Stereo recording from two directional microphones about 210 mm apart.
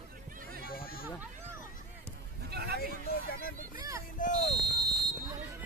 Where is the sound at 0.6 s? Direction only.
45° left (ahead or behind).